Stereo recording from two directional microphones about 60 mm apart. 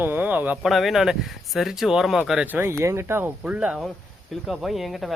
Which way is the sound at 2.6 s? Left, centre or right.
Right.